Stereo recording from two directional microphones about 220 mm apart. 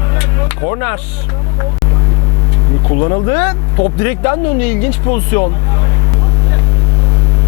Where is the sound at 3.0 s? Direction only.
20° left (ahead or behind).